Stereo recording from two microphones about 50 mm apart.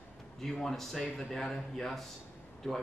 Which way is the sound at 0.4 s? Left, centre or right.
Centre.